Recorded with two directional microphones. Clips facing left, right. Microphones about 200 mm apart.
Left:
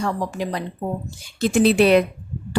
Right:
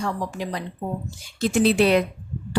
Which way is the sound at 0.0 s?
65° left (ahead or behind).